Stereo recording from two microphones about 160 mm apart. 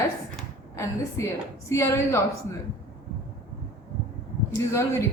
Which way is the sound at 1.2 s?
20° left (ahead or behind).